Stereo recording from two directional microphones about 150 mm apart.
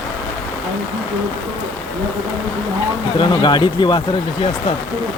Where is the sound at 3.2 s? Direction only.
30° left (ahead or behind).